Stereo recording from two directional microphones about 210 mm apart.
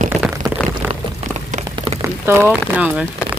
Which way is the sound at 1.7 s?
25° right (ahead or behind).